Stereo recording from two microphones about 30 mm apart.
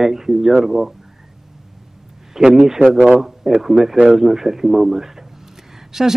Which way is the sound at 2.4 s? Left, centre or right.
Centre.